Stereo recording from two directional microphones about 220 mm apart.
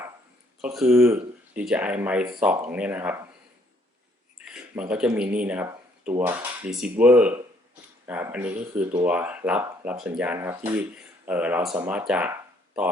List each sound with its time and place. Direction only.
0.6 s speech: 5° right (ahead or behind)
4.4 s speech: 5° right (ahead or behind)